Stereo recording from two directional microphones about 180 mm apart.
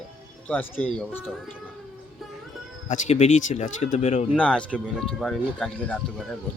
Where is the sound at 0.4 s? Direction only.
10° left (ahead or behind).